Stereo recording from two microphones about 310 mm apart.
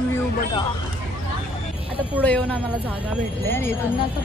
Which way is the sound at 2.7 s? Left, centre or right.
Centre.